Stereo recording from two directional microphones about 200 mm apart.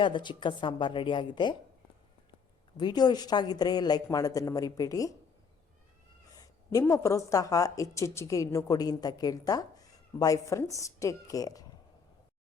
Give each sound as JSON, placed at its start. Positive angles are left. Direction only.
{"t": 0.0, "sound": "speech", "side_deg": 25}
{"t": 2.7, "sound": "speech", "side_deg": 20}
{"t": 6.3, "sound": "speech", "side_deg": 15}